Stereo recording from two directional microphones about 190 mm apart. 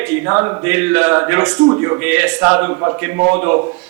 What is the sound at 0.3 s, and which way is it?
Speech, 20° right (ahead or behind).